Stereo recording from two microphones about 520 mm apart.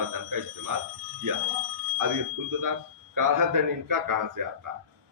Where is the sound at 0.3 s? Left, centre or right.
Right.